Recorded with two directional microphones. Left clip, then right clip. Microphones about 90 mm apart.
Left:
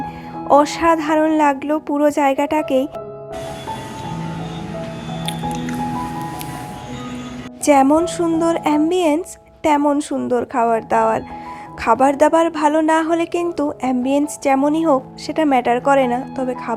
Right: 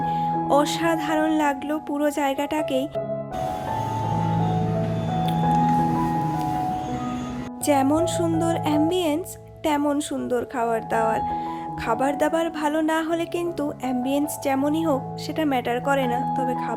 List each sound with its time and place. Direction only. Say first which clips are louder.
0.4 s speech: left 10 dB; 35° left (ahead or behind)
7.6 s a woman's voice: left 8 dB; 35° left (ahead or behind)
7.9 s a woman's voice: left 6 dB; 25° left (ahead or behind)